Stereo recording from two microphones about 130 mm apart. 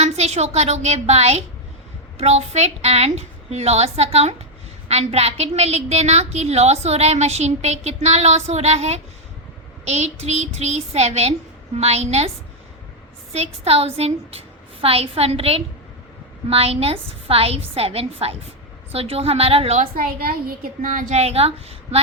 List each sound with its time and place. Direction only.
0.0 s a woman's voice: 55° right (ahead or behind)
13.3 s a woman's voice: 55° right (ahead or behind)
19.8 s a child's voice: 90° right; by 22.0 s 50° right (ahead or behind)